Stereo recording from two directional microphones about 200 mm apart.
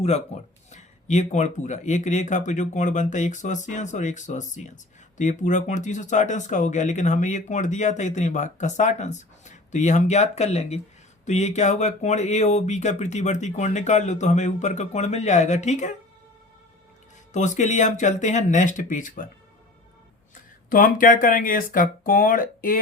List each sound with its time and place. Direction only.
0.3 s speech: 35° left (ahead or behind)
17.3 s speech: 35° left (ahead or behind)
20.7 s speech: 45° left (ahead or behind)